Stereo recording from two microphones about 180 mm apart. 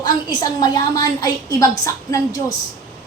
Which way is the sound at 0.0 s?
25° left (ahead or behind).